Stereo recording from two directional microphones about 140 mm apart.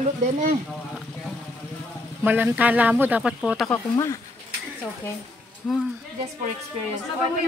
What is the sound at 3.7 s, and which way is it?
Speech, 20° left (ahead or behind).